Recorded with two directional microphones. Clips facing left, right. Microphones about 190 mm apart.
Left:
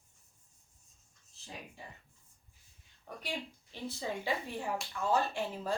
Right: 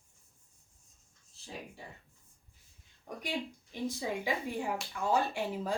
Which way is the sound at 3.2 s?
15° right (ahead or behind).